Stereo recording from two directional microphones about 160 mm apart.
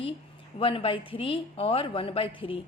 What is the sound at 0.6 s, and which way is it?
A woman's voice, 35° left (ahead or behind).